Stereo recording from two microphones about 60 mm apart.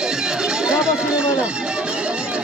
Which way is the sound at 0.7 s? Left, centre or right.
Centre.